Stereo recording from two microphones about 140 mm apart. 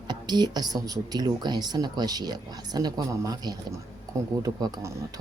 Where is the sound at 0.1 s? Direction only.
30° right (ahead or behind).